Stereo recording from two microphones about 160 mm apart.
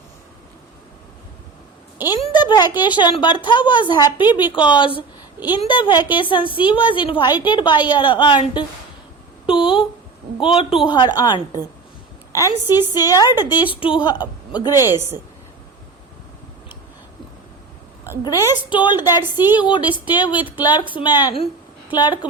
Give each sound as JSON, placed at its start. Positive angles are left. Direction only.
{"t": 2.3, "sound": "a woman's voice", "side_deg": 25}
{"t": 18.2, "sound": "a woman's voice", "side_deg": 25}